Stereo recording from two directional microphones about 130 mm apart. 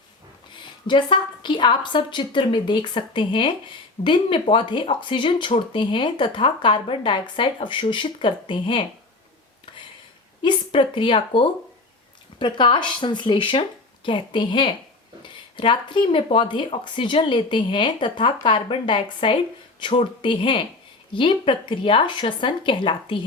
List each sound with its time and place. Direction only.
0.5 s a woman's voice: 35° left (ahead or behind)
10.4 s a woman's voice: 40° left (ahead or behind)